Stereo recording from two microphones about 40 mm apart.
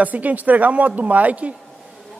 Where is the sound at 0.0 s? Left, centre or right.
Right.